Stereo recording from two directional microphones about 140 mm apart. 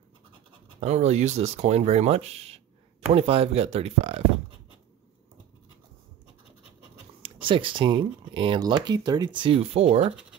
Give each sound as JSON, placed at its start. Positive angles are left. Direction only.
{"t": 0.7, "sound": "speech", "side_deg": -50}
{"t": 7.2, "sound": "speech", "side_deg": -40}